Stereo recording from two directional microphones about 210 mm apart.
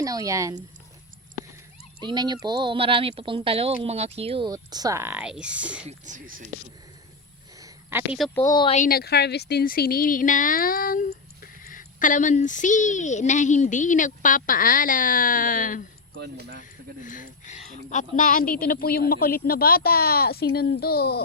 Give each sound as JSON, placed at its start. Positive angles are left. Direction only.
{"t": 0.0, "sound": "speech", "side_deg": -15}
{"t": 2.0, "sound": "speech", "side_deg": -20}
{"t": 5.9, "sound": "speech", "side_deg": -35}
{"t": 7.6, "sound": "a sound", "side_deg": -10}
{"t": 8.4, "sound": "speech", "side_deg": 20}
{"t": 8.8, "sound": "speech", "side_deg": 45}
{"t": 16.1, "sound": "speech", "side_deg": -55}
{"t": 17.0, "sound": "a woman's voice", "side_deg": 40}